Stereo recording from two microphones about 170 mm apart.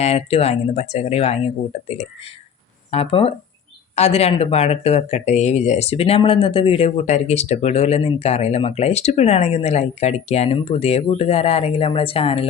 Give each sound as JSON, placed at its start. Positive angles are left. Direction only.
{"t": 0.0, "sound": "speech", "side_deg": 40}
{"t": 2.9, "sound": "speech", "side_deg": 35}